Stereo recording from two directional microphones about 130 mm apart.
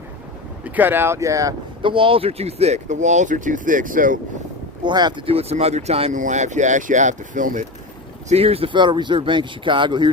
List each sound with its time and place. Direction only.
0.6 s speech: 15° right (ahead or behind)
1.8 s speech: 40° right (ahead or behind); by 4.2 s 90° right
4.8 s speech: 35° right (ahead or behind); by 6.1 s 55° right (ahead or behind)
6.1 s speech: 70° right (ahead or behind)
8.3 s speech: 50° right (ahead or behind)